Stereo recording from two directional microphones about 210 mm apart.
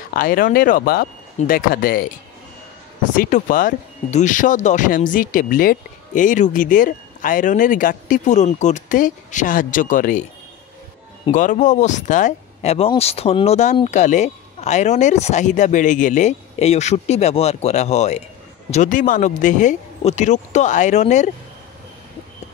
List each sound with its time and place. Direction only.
0.1 s speech: 40° left (ahead or behind)
3.2 s speech: 35° left (ahead or behind)
11.3 s speech: 35° left (ahead or behind)